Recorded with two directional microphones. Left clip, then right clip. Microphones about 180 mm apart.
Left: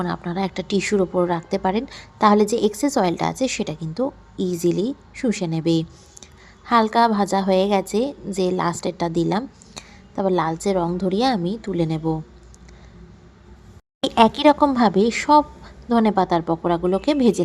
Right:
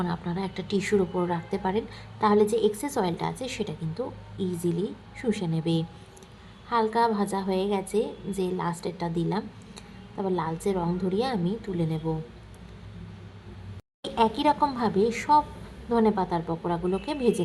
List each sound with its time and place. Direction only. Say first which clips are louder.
0.0 s a woman's voice: left 7 dB; 30° left (ahead or behind)
14.2 s a woman's voice: left 8 dB; 35° left (ahead or behind)